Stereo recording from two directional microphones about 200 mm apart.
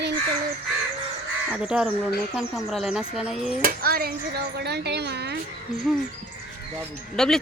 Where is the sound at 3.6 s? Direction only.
45° right (ahead or behind).